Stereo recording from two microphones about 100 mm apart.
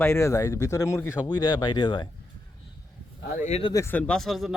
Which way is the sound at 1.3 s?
45° left (ahead or behind).